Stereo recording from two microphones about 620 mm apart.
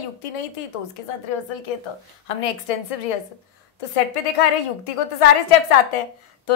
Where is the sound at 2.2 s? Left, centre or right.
Left.